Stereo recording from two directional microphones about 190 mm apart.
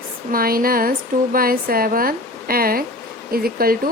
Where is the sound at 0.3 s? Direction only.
50° right (ahead or behind).